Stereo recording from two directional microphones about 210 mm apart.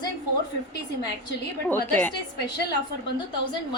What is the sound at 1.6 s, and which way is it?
Speech, 10° left (ahead or behind).